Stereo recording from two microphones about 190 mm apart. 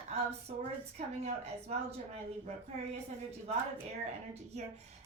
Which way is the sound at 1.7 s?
35° right (ahead or behind).